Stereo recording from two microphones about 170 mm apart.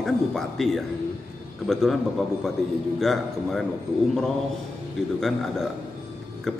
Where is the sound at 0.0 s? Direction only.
Centre (ahead or behind).